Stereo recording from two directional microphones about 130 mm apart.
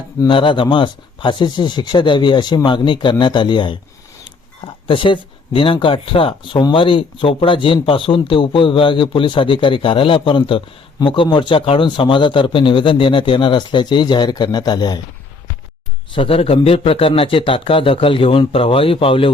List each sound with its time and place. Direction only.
0.3 s speech: 40° left (ahead or behind)
16.1 s speech: 45° left (ahead or behind)